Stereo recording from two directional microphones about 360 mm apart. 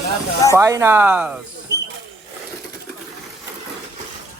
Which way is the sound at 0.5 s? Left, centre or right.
Centre.